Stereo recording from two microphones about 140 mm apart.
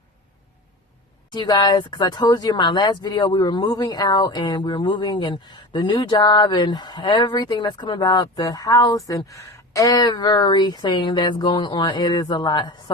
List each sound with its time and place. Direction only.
1.3 s speech: 30° left (ahead or behind)